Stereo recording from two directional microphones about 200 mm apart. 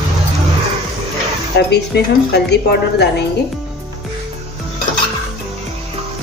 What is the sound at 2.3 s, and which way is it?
Speech, 55° left (ahead or behind).